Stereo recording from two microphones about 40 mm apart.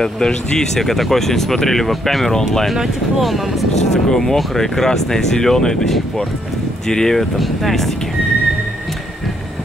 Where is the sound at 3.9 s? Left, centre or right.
Centre.